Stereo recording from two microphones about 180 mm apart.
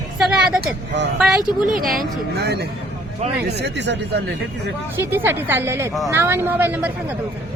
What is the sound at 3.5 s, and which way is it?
Speech, 75° right (ahead or behind).